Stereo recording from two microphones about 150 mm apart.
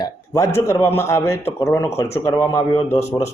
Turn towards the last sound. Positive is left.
turn(degrees=20)  # may be behind; listen again after turning